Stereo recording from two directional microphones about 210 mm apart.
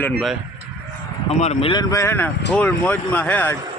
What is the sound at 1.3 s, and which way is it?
Speech, 30° left (ahead or behind).